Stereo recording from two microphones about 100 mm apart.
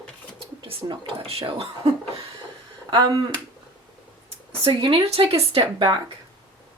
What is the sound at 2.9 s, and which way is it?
Speech, 50° right (ahead or behind).